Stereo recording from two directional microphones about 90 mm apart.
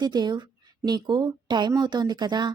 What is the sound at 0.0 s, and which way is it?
A woman's voice, 50° right (ahead or behind).